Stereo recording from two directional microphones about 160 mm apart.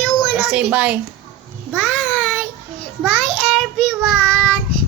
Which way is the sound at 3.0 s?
5° left (ahead or behind).